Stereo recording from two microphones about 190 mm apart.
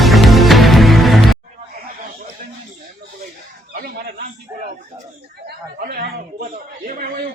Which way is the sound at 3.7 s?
55° right (ahead or behind).